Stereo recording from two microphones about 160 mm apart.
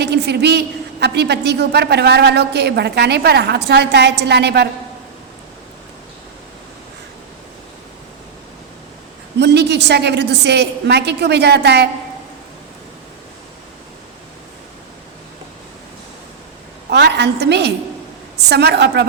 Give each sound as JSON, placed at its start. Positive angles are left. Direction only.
{"t": 0.0, "sound": "a woman's voice", "side_deg": -90}
{"t": 9.4, "sound": "a woman's voice", "side_deg": -90}
{"t": 16.9, "sound": "a woman's voice", "side_deg": -90}